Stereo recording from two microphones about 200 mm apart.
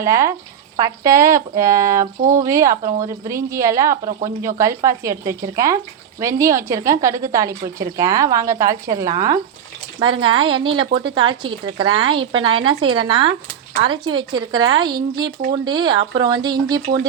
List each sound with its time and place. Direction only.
0.0 s speech: 15° right (ahead or behind)